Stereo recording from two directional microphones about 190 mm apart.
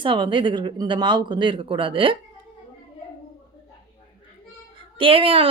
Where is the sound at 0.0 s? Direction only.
25° right (ahead or behind).